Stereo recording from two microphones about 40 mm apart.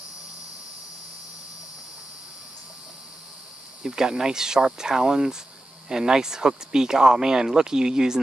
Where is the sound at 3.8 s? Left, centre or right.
Centre.